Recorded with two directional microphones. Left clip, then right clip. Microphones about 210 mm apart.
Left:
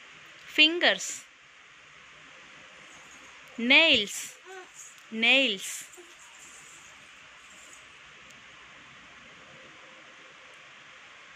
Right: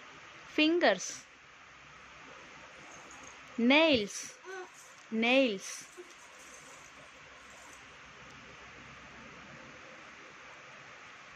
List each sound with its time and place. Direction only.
0.6 s speech: 10° right (ahead or behind)
3.6 s speech: 10° right (ahead or behind)
5.1 s speech: 10° right (ahead or behind)